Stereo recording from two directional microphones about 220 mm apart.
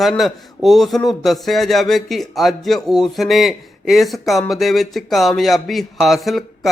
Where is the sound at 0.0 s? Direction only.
Centre (ahead or behind).